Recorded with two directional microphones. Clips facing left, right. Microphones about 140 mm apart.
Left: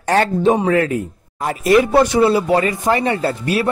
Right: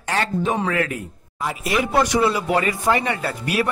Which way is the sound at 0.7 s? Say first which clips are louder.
Left 7 dB; 35° left (ahead or behind).